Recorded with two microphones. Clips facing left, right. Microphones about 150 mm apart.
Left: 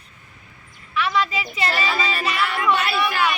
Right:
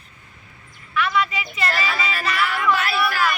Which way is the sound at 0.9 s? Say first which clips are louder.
Even; 30° left (ahead or behind).